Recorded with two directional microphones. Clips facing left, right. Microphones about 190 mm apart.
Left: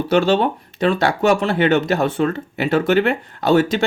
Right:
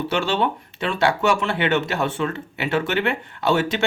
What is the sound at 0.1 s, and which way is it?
Speech, 40° left (ahead or behind).